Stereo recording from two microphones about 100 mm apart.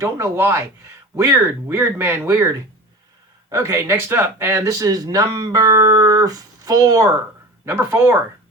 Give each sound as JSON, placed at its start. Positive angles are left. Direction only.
{"t": 0.0, "sound": "speech", "side_deg": -25}
{"t": 4.7, "sound": "speech", "side_deg": -40}
{"t": 7.6, "sound": "speech", "side_deg": -25}